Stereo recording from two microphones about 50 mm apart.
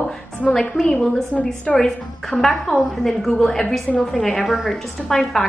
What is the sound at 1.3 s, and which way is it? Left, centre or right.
Speech, left.